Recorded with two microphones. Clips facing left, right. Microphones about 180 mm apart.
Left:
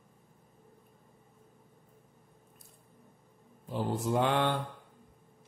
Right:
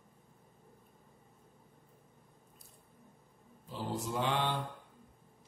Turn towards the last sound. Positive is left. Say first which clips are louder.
# left 5 dB
turn(degrees=55)  # may be behind; listen again after turning